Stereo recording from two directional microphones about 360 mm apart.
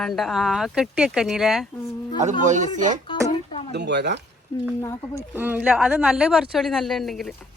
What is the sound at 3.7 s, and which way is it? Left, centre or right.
Speech, right.